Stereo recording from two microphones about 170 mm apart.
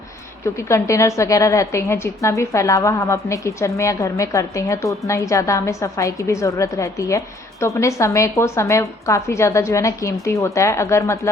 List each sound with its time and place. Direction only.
0.4 s a woman's voice: 15° left (ahead or behind)